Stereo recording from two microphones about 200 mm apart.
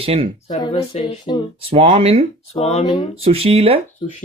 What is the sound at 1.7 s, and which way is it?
Speech, 30° right (ahead or behind).